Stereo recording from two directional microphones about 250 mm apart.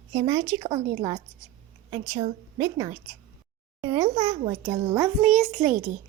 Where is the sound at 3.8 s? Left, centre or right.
Centre.